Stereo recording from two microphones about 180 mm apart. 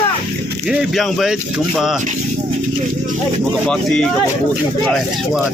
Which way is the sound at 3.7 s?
5° left (ahead or behind).